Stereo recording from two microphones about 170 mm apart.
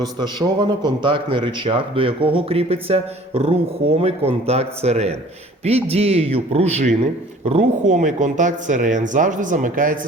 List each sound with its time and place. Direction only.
0.0 s a man's voice: 25° right (ahead or behind); by 10.1 s 50° right (ahead or behind)